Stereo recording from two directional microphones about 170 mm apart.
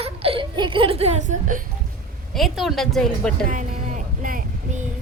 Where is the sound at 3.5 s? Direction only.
50° right (ahead or behind).